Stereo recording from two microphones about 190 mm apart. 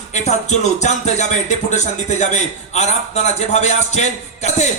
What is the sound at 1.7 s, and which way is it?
A man's voice, 40° left (ahead or behind).